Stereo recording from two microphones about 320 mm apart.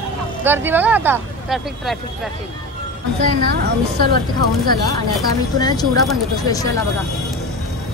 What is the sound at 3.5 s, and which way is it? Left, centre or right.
Speech, right.